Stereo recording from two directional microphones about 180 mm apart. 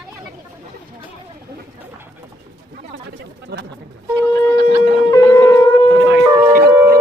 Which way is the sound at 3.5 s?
65° right (ahead or behind).